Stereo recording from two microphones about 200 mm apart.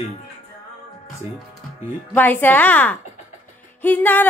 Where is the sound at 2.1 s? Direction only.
10° left (ahead or behind).